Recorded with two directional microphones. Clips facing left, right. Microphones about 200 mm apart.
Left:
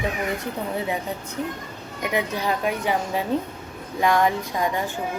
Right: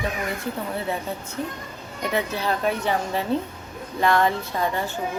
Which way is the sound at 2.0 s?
15° left (ahead or behind).